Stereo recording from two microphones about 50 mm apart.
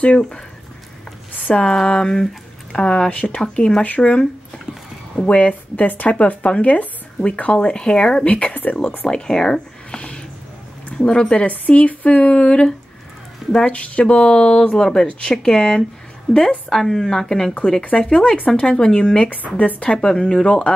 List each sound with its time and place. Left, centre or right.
0.0 s speech: centre
1.5 s a woman's voice: centre
3.3 s a woman's voice: centre
3.8 s speech: left
8.3 s speech: left
9.0 s speech: centre
9.9 s a sound: left
10.9 s speech: centre
11.4 s a woman's voice: left; by 17.5 s centre
17.9 s a woman's voice: centre